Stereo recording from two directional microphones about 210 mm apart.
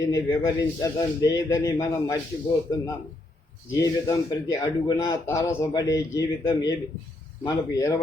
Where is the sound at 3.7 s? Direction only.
15° left (ahead or behind).